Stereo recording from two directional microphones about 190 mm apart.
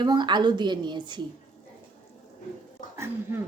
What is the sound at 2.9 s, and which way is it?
Speech, 15° right (ahead or behind).